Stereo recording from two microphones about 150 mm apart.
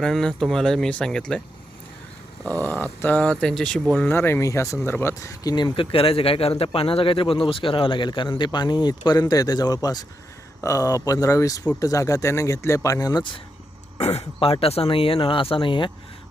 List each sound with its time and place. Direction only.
0.0 s speech: 5° left (ahead or behind)
2.4 s speech: 10° left (ahead or behind); by 13.4 s 30° left (ahead or behind)
14.0 s speech: 45° left (ahead or behind)